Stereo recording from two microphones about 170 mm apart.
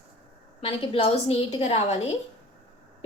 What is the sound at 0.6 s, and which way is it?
A woman's voice, 30° left (ahead or behind).